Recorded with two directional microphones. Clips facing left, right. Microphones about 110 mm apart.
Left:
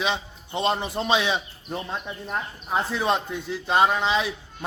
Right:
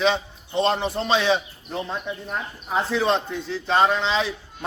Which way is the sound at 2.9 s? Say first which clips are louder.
Right 3 dB; 10° left (ahead or behind).